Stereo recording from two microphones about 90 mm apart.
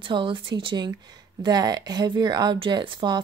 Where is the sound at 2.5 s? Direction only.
70° right (ahead or behind).